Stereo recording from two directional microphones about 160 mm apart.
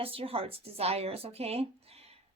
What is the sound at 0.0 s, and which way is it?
Speech, 35° right (ahead or behind).